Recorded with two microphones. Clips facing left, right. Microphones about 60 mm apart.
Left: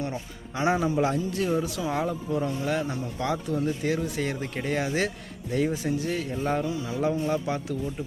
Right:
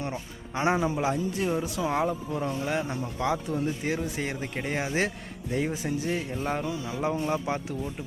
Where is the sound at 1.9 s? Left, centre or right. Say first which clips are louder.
Right 1 dB; centre.